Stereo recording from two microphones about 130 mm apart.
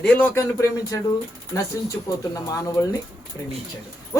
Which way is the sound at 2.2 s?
25° left (ahead or behind).